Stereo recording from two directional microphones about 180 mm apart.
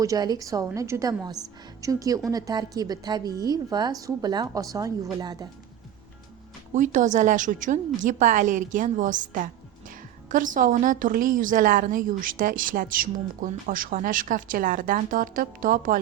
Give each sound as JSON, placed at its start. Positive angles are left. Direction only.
{"t": 0.0, "sound": "a woman's voice", "side_deg": -20}
{"t": 6.7, "sound": "a woman's voice", "side_deg": -45}